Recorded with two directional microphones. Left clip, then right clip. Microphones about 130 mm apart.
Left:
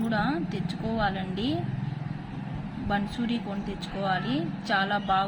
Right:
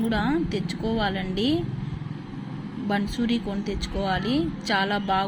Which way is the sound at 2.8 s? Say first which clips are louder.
Right 3 dB; 10° right (ahead or behind).